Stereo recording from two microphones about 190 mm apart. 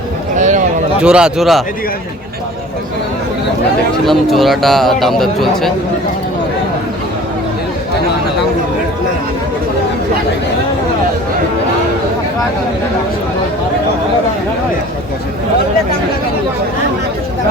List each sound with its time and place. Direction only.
0.3 s a sound: 40° right (ahead or behind)
1.0 s speech: 5° right (ahead or behind)
4.0 s speech: centre (ahead or behind)